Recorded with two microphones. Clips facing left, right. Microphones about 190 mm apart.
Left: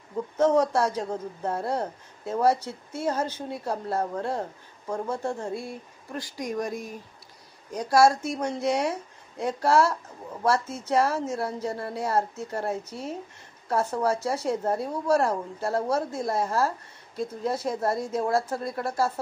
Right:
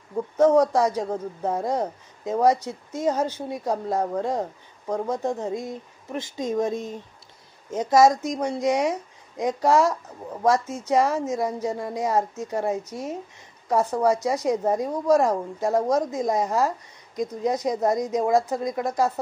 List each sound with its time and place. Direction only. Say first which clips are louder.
0.1 s speech: right 4 dB; 15° right (ahead or behind)